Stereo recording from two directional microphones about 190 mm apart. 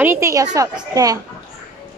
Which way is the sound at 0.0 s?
15° right (ahead or behind).